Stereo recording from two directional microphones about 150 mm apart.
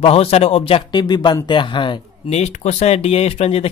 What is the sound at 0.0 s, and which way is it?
Speech, 40° left (ahead or behind).